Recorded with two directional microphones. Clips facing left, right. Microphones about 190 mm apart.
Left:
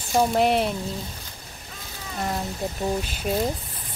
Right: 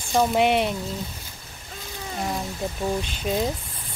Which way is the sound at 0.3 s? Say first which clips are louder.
Even; centre (ahead or behind).